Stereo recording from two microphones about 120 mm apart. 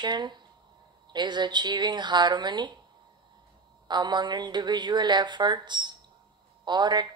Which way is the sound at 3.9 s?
40° right (ahead or behind).